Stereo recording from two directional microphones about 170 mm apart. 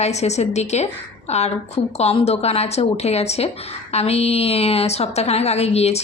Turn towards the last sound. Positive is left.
turn(degrees=40)  # may be behind; listen again after turning